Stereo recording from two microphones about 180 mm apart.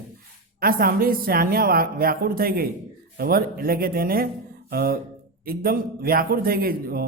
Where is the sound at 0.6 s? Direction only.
55° right (ahead or behind).